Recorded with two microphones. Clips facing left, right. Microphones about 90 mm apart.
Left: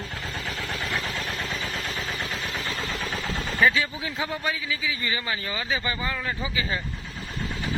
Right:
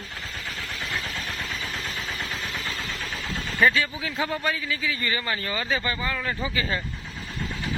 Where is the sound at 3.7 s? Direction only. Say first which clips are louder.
Right 1 dB; 15° left (ahead or behind).